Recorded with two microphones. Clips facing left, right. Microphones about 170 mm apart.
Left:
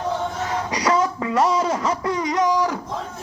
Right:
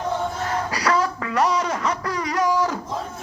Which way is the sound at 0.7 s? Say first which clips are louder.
Left 3 dB; 20° left (ahead or behind).